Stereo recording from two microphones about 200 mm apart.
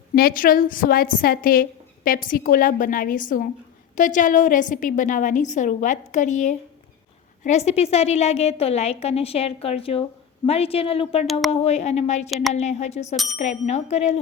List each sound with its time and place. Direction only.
0.1 s a woman's voice: 45° left (ahead or behind); by 11.3 s 30° left (ahead or behind)
11.3 s speech: centre (ahead or behind)
11.5 s a woman's voice: 30° left (ahead or behind)
12.3 s speech: centre (ahead or behind)
12.5 s a woman's voice: 35° left (ahead or behind)
13.1 s speech: centre (ahead or behind)
13.4 s a woman's voice: 35° left (ahead or behind)